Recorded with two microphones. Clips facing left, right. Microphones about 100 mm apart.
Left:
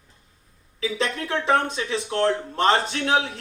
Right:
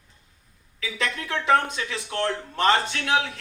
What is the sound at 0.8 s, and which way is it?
Speech, 30° left (ahead or behind).